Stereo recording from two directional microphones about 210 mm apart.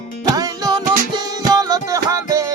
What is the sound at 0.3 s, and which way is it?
Music, 20° right (ahead or behind).